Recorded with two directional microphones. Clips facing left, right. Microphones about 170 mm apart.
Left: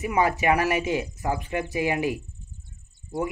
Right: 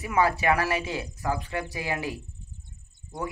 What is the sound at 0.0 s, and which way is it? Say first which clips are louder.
Speech: left 1 dB; 15° left (ahead or behind).